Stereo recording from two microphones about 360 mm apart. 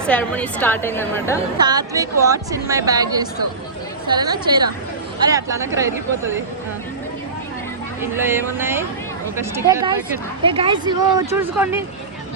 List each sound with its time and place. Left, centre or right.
0.0 s a woman's voice: centre
1.6 s a woman's voice: centre
8.0 s a woman's voice: centre